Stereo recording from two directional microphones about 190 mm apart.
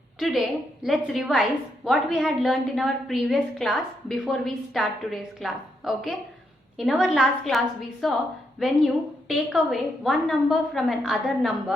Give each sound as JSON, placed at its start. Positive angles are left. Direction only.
{"t": 0.2, "sound": "a woman's voice", "side_deg": 0}